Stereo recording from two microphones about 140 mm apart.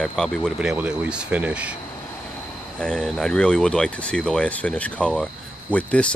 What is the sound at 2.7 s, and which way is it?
Speech, 5° left (ahead or behind).